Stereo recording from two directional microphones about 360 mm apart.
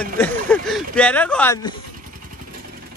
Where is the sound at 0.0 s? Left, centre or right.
Centre.